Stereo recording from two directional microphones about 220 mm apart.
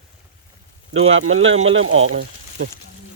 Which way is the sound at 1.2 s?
65° right (ahead or behind).